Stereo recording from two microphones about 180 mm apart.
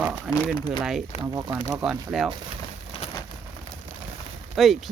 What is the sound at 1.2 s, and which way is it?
Speech, 25° right (ahead or behind).